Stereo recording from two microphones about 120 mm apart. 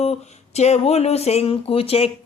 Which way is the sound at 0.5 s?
65° left (ahead or behind).